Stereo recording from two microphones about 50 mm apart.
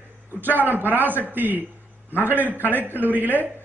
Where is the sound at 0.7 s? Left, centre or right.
Right.